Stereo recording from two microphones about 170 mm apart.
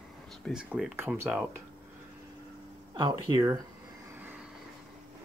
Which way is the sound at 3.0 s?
25° right (ahead or behind).